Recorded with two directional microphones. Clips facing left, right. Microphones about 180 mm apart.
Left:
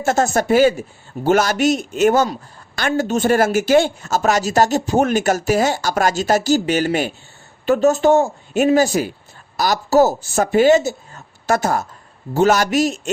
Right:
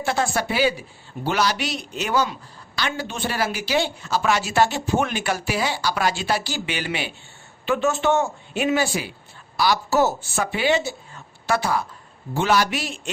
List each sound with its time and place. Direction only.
0.0 s speech: 45° left (ahead or behind)